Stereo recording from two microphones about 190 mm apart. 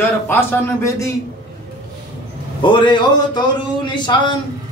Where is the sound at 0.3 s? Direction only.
15° left (ahead or behind).